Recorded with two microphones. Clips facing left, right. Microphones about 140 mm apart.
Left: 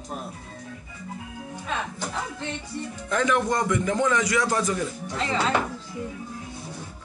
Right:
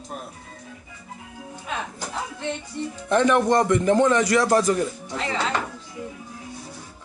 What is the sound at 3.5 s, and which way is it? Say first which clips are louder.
A man's voice: right 6 dB; 35° right (ahead or behind).